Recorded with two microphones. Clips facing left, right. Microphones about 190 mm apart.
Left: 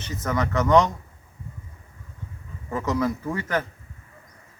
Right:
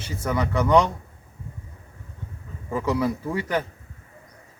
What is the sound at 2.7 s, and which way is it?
Speech, 10° right (ahead or behind).